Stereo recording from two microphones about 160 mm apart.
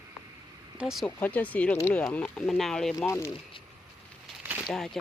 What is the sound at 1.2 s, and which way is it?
Speech, 10° left (ahead or behind).